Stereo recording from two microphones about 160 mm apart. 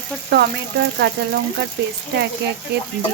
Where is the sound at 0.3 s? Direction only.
90° right.